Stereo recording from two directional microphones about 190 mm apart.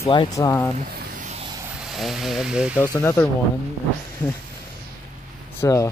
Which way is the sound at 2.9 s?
15° left (ahead or behind).